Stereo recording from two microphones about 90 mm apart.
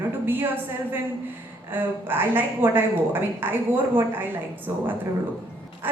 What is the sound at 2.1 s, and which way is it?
A woman's voice, 25° right (ahead or behind).